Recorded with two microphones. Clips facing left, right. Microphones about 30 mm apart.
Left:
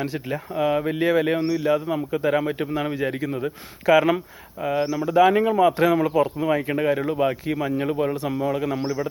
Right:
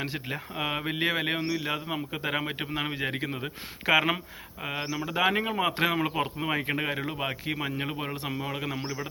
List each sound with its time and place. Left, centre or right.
0.0 s a man's voice: right
5.9 s a man's voice: right